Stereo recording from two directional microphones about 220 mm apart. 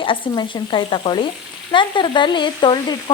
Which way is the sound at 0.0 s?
20° left (ahead or behind).